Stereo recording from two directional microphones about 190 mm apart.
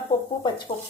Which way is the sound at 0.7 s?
35° left (ahead or behind).